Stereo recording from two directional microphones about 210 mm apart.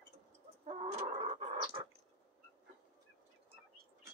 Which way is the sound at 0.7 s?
25° right (ahead or behind).